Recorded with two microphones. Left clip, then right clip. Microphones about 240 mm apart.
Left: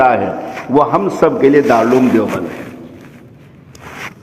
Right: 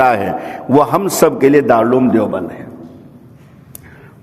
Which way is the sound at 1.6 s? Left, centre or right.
Right.